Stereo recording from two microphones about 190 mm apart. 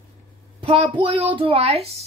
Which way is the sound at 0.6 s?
25° right (ahead or behind).